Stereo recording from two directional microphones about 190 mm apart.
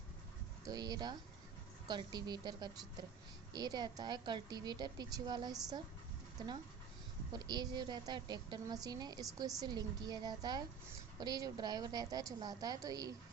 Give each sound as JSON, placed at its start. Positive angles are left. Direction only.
{"t": 0.6, "sound": "a woman's voice", "side_deg": -20}